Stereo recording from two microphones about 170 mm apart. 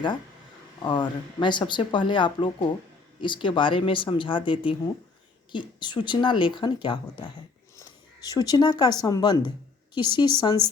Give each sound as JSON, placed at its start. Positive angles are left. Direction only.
{"t": 0.8, "sound": "speech", "side_deg": 25}